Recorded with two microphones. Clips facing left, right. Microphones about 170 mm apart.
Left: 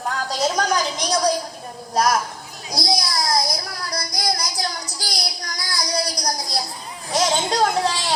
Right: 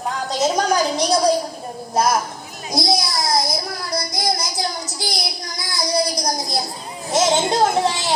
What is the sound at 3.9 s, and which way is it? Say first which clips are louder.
Child singing: right 3 dB; 25° right (ahead or behind).